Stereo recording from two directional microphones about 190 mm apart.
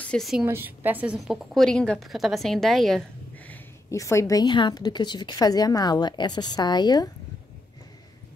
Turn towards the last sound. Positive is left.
turn(degrees=20)  # may be behind; listen again after turning